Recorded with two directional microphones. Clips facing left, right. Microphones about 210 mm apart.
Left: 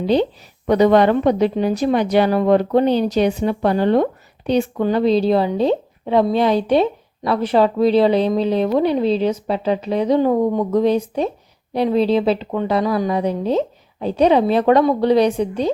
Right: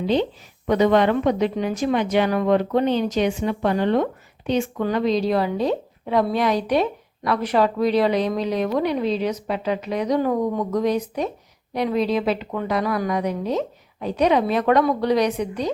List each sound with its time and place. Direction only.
0.7 s speech: 35° left (ahead or behind)